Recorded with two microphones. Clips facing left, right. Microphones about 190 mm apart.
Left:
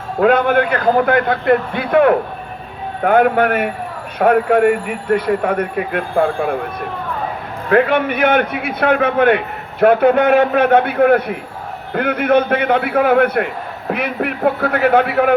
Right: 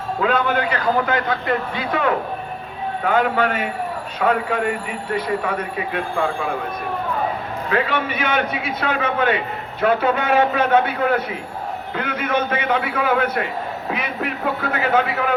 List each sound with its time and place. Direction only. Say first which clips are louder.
0.2 s a man's voice: left 7 dB; 55° left (ahead or behind)
7.7 s a man's voice: left 8 dB; 55° left (ahead or behind)